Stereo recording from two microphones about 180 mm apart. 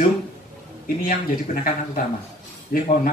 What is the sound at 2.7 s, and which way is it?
Speech, 50° left (ahead or behind).